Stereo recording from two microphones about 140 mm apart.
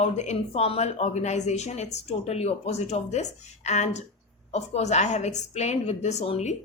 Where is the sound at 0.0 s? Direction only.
50° left (ahead or behind).